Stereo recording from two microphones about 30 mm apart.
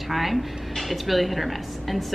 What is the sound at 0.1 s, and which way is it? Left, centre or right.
A woman's voice, centre.